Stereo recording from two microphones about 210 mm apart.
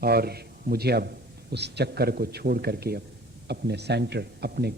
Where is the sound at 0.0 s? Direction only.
50° right (ahead or behind).